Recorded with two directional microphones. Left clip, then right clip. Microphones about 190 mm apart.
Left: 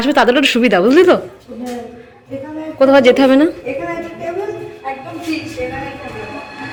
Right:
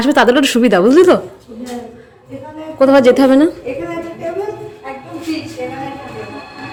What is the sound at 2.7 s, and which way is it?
Speech, 15° right (ahead or behind).